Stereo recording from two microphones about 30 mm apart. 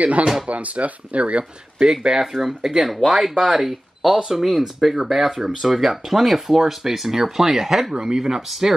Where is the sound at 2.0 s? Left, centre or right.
Right.